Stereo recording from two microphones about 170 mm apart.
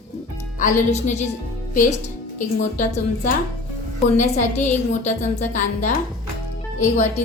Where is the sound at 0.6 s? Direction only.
40° left (ahead or behind).